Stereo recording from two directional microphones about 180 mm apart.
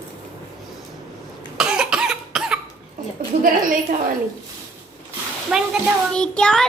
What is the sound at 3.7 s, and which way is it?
Speech, 50° right (ahead or behind).